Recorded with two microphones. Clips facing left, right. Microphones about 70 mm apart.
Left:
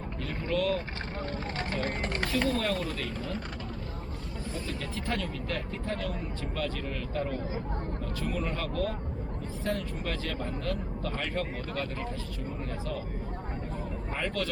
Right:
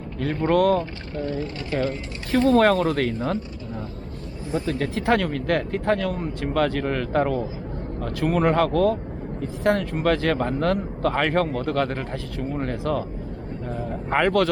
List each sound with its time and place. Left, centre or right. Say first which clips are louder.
0.2 s speech: right 11 dB; right
1.2 s speech: right 8 dB; left
2.5 s speech: right 13 dB; right
4.6 s speech: right 11 dB; right
14.1 s speech: right 14 dB; right